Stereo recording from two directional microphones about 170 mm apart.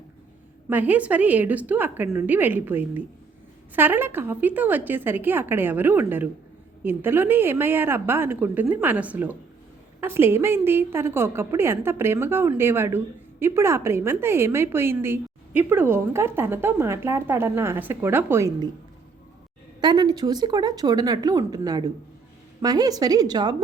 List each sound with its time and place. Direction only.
0.7 s speech: 10° right (ahead or behind)
19.8 s speech: 25° right (ahead or behind)